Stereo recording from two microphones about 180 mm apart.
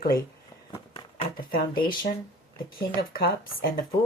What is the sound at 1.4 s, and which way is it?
Speech, 55° left (ahead or behind).